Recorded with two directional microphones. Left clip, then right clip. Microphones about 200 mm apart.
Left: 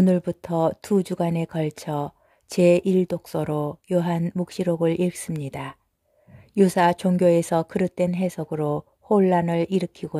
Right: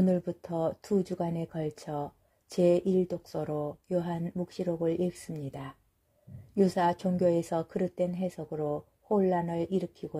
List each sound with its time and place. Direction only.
0.0 s speech: 25° left (ahead or behind)